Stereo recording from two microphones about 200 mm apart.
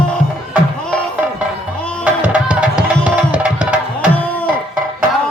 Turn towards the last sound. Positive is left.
turn(degrees=-5)  # may be behind; listen again after turning